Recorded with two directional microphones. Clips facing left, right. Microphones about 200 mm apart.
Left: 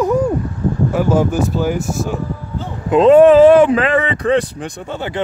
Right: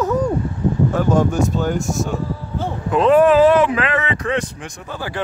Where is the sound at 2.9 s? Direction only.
25° left (ahead or behind).